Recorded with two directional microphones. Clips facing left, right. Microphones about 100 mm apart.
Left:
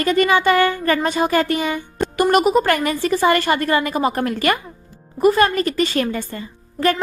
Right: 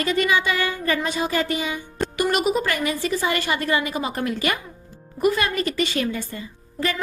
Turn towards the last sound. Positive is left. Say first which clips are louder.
# left 7 dB
turn(degrees=55)  # may be behind; listen again after turning